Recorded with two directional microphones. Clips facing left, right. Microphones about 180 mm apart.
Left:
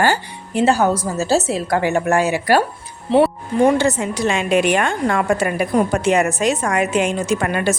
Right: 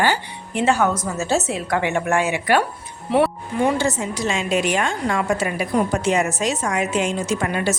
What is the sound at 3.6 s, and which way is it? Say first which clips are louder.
A woman's voice: left 5 dB; 60° left (ahead or behind).